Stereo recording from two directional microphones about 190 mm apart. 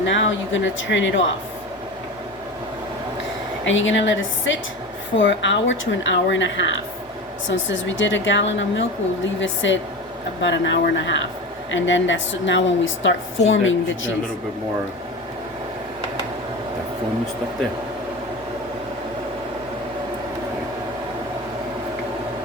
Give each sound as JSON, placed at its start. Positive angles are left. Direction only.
{"t": 0.0, "sound": "speech", "side_deg": 75}
{"t": 3.6, "sound": "a woman's voice", "side_deg": 85}
{"t": 13.5, "sound": "speech", "side_deg": 90}